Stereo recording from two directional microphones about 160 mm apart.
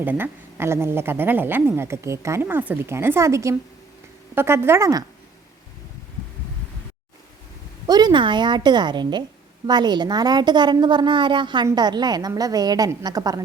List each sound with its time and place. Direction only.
0.0 s a woman's voice: 10° right (ahead or behind)
7.9 s a woman's voice: 25° right (ahead or behind)